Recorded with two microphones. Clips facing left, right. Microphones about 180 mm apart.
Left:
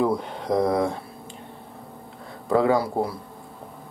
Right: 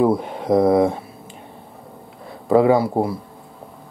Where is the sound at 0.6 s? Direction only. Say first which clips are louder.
Right 7 dB; 25° right (ahead or behind).